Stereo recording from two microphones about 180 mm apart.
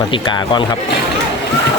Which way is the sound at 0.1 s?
25° left (ahead or behind).